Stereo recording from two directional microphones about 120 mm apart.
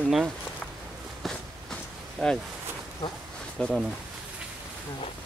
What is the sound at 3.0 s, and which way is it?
Speech, 40° left (ahead or behind).